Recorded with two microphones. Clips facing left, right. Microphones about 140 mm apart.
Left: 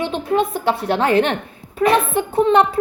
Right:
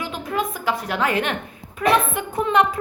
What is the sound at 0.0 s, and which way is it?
A woman's voice, 30° left (ahead or behind).